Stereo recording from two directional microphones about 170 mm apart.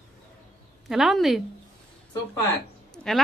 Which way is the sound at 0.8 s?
Centre (ahead or behind).